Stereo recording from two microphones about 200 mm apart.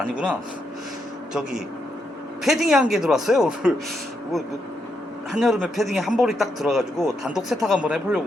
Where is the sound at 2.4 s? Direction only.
Centre (ahead or behind).